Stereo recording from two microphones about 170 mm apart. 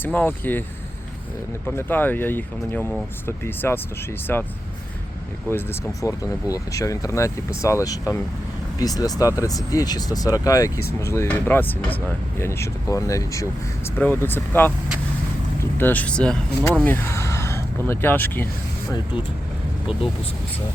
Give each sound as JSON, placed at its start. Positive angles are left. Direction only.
{"t": 0.0, "sound": "speech", "side_deg": 10}
{"t": 1.6, "sound": "speech", "side_deg": 10}
{"t": 6.0, "sound": "speech", "side_deg": 20}
{"t": 15.8, "sound": "speech", "side_deg": 10}